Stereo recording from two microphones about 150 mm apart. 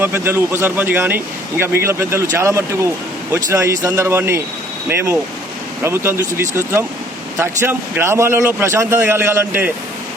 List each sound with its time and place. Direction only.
0.0 s a man's voice: 15° right (ahead or behind)